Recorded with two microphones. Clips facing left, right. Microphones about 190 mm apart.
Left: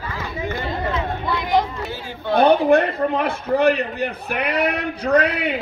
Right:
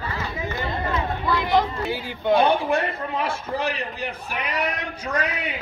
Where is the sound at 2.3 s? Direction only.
60° left (ahead or behind).